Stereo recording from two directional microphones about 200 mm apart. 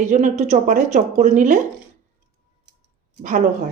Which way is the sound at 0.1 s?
35° right (ahead or behind).